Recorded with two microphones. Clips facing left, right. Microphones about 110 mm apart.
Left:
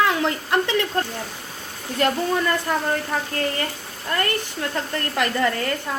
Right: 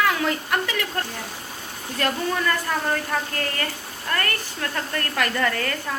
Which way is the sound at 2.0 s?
25° left (ahead or behind).